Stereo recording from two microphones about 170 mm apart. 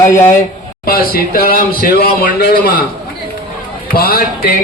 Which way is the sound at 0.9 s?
60° left (ahead or behind).